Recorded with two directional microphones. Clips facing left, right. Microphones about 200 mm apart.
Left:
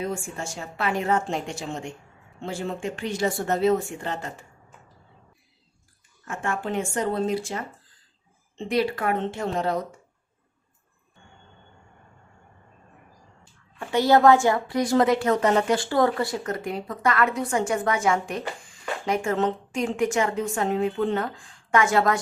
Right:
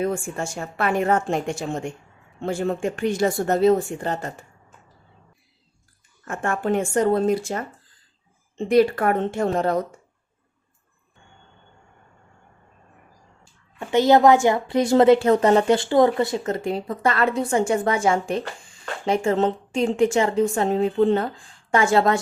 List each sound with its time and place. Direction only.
0.0 s a woman's voice: 55° right (ahead or behind)
6.2 s a woman's voice: 50° right (ahead or behind)
13.7 s a woman's voice: 20° right (ahead or behind)